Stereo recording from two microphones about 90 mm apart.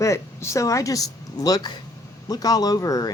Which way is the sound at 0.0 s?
35° left (ahead or behind).